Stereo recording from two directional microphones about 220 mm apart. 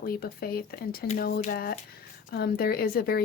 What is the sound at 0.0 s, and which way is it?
A woman's voice, 45° left (ahead or behind).